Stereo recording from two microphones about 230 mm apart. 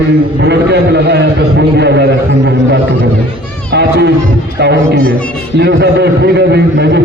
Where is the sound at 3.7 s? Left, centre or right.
Right.